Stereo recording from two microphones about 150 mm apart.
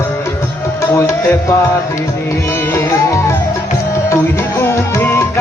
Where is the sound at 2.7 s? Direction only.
20° left (ahead or behind).